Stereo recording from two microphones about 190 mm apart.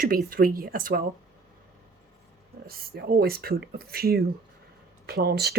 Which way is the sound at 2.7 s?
50° right (ahead or behind).